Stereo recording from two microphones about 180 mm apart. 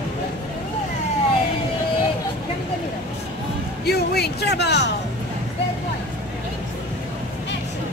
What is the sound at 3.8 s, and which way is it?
Music, 60° left (ahead or behind).